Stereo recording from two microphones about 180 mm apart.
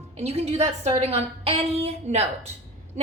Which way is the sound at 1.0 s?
35° right (ahead or behind).